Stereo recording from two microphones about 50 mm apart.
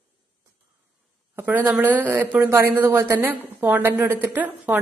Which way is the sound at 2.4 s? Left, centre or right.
Right.